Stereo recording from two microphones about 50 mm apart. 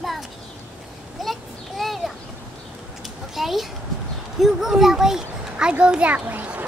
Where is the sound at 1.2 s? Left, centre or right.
Centre.